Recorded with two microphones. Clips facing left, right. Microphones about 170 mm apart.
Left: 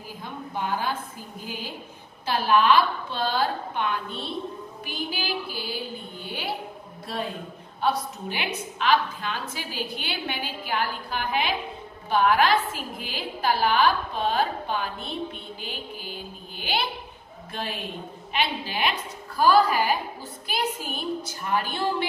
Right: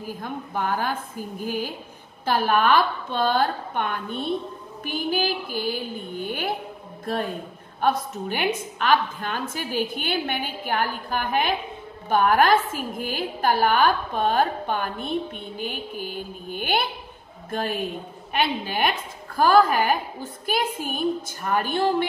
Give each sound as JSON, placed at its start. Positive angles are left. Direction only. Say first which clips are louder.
{"t": 0.2, "sound": "a woman's voice", "louder": "right 2 dB", "side_deg": -50}
{"t": 7.8, "sound": "a woman's voice", "louder": "right 3 dB", "side_deg": -50}